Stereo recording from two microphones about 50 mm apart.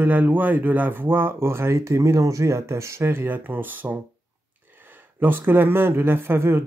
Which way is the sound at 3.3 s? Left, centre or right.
Right.